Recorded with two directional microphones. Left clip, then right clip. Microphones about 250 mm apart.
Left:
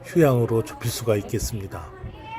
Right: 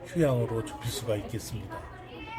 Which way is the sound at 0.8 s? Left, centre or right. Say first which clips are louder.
Left 8 dB; left.